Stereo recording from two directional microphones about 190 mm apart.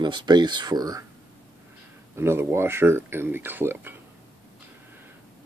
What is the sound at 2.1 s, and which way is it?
Speech, 15° right (ahead or behind).